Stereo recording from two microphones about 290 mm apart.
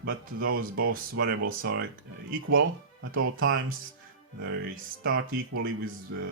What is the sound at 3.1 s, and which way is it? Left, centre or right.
Speech, right.